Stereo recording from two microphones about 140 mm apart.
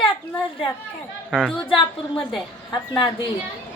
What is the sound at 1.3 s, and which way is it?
Speech, 5° left (ahead or behind).